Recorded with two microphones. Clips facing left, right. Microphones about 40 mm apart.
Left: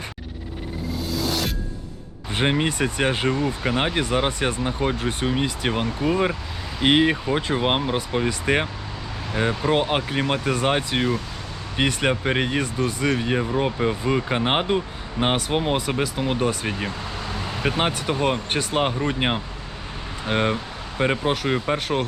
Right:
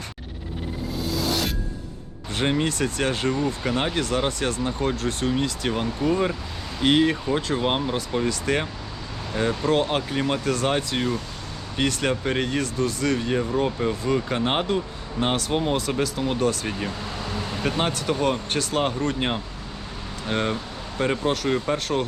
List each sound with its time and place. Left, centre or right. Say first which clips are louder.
1.0 s music: even; centre
2.3 s speech: left 2 dB; left